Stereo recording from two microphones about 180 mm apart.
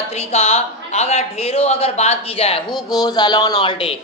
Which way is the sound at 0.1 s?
35° left (ahead or behind).